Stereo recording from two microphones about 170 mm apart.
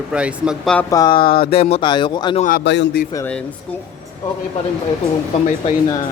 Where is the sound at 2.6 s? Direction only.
90° left.